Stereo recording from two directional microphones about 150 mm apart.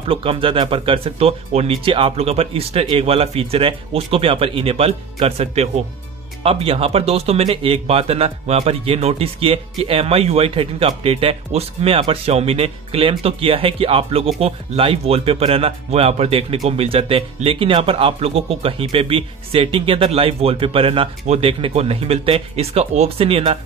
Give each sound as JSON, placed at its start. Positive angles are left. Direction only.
{"t": 0.1, "sound": "speech", "side_deg": -35}